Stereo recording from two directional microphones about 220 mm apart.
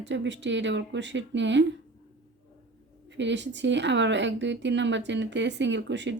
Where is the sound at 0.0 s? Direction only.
55° right (ahead or behind).